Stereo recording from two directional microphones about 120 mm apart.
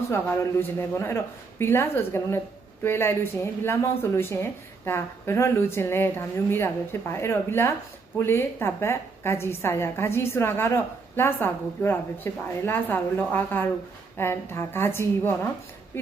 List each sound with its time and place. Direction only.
0.1 s a woman's voice: 20° left (ahead or behind)